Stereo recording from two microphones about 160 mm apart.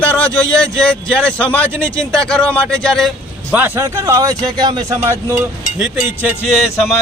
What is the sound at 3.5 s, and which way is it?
A man's voice, 10° right (ahead or behind).